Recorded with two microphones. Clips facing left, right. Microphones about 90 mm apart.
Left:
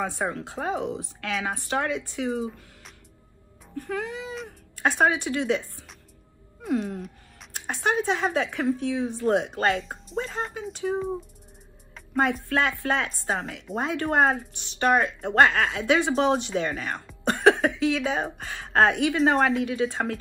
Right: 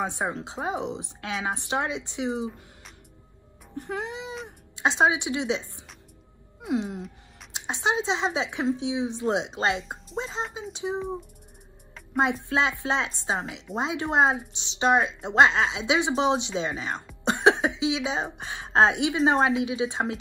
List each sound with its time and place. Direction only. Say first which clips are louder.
0.0 s a woman's voice: even; 20° right (ahead or behind)
3.7 s a woman's voice: left 1 dB; 20° right (ahead or behind)
6.6 s music: left 1 dB; 20° right (ahead or behind)
7.5 s a woman's voice: left 1 dB; 20° right (ahead or behind)
12.1 s a woman's voice: left 1 dB; 20° right (ahead or behind)